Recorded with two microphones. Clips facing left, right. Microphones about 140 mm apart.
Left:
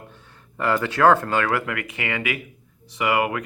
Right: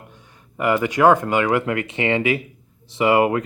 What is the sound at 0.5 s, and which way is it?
Speech, 15° right (ahead or behind).